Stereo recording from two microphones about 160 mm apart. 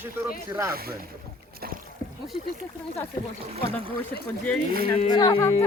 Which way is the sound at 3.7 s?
35° right (ahead or behind).